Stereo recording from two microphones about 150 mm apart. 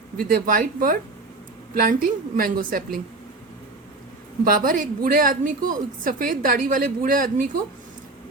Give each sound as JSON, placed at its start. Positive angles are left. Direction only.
{"t": 0.2, "sound": "a woman's voice", "side_deg": -70}
{"t": 4.4, "sound": "a woman's voice", "side_deg": -65}